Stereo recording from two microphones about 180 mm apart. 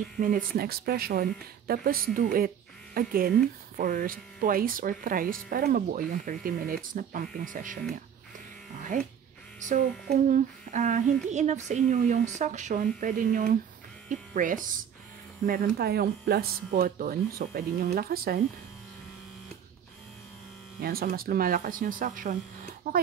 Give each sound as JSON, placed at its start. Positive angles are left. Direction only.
{"t": 0.2, "sound": "speech", "side_deg": -50}
{"t": 8.9, "sound": "speech", "side_deg": -45}
{"t": 20.8, "sound": "speech", "side_deg": -55}